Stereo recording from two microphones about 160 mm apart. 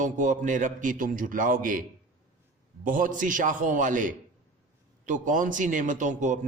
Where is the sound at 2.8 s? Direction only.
55° right (ahead or behind).